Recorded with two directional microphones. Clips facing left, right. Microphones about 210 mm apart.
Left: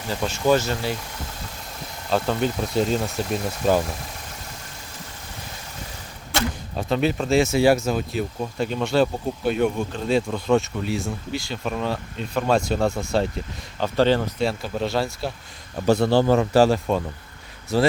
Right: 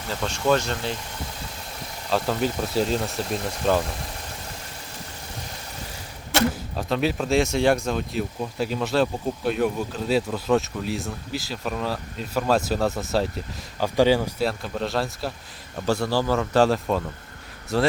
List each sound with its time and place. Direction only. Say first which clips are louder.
0.1 s speech: left 2 dB; 5° left (ahead or behind)
2.0 s speech: left 1 dB; centre (ahead or behind)
6.5 s speech: left 2 dB; centre (ahead or behind)
15.9 s speech: left 5 dB; 20° left (ahead or behind)
16.6 s speech: left 2 dB; centre (ahead or behind)